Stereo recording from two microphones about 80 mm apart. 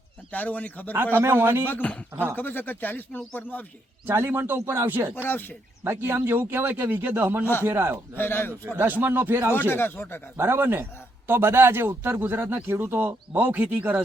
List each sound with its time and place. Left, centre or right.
0.3 s speech: centre
1.1 s speech: right
1.6 s speech: centre
4.0 s speech: right
5.1 s speech: left
5.8 s speech: right
8.1 s speech: left
8.8 s speech: right
9.5 s speech: left
10.3 s speech: right